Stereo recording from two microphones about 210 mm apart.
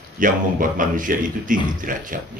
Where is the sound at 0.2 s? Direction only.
40° right (ahead or behind).